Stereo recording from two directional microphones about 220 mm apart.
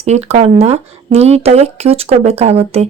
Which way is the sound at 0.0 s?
30° right (ahead or behind).